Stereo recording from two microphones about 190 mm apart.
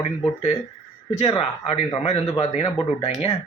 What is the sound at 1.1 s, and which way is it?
Speech, 35° left (ahead or behind).